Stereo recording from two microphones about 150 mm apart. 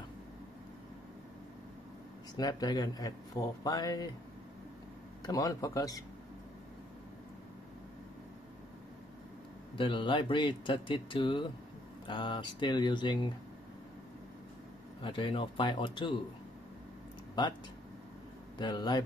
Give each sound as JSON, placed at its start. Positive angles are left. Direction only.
{"t": 2.3, "sound": "speech", "side_deg": 25}
{"t": 5.2, "sound": "speech", "side_deg": 25}
{"t": 9.8, "sound": "speech", "side_deg": 35}
{"t": 15.0, "sound": "speech", "side_deg": 35}
{"t": 17.4, "sound": "speech", "side_deg": 30}
{"t": 18.6, "sound": "speech", "side_deg": 30}